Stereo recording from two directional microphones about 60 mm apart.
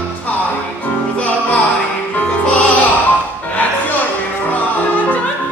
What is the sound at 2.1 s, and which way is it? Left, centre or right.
Music, left.